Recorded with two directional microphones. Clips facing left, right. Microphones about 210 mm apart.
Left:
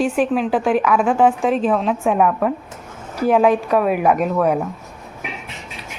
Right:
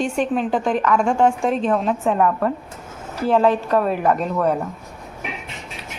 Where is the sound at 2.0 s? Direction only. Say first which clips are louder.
Left 2 dB; 10° left (ahead or behind).